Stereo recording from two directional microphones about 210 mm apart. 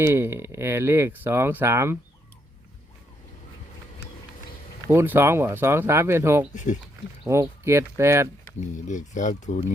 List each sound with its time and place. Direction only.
0.0 s speech: 10° right (ahead or behind)
4.9 s speech: 10° right (ahead or behind)
6.5 s speech: 35° left (ahead or behind)
7.3 s speech: 15° right (ahead or behind)
8.6 s speech: 35° left (ahead or behind)